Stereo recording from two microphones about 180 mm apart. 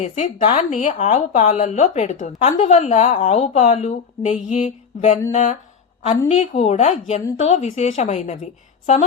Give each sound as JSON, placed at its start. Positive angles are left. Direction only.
{"t": 0.0, "sound": "a woman's voice", "side_deg": 40}